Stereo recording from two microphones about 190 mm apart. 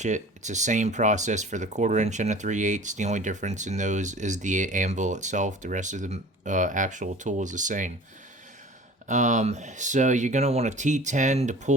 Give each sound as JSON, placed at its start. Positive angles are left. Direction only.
{"t": 0.0, "sound": "speech", "side_deg": -40}
{"t": 9.0, "sound": "speech", "side_deg": -40}